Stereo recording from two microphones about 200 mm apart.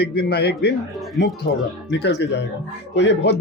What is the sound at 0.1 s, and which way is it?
Speech, 55° left (ahead or behind).